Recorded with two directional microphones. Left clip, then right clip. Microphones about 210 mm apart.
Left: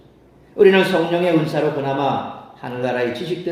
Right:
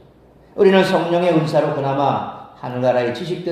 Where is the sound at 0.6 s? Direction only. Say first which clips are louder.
Even; 20° right (ahead or behind).